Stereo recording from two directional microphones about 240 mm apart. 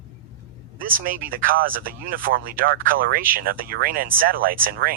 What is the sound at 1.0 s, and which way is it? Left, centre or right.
Speech, right.